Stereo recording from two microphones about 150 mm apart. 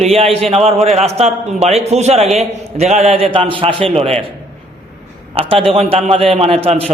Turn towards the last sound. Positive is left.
turn(degrees=-45)  # may be behind; listen again after turning